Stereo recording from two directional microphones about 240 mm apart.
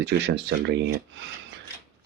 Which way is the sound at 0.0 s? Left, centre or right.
Right.